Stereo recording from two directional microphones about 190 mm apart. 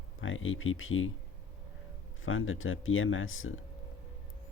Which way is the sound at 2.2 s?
90° left.